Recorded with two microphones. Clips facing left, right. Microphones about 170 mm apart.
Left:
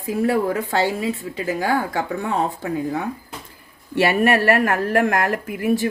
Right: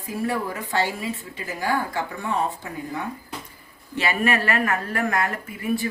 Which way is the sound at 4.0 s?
65° left (ahead or behind).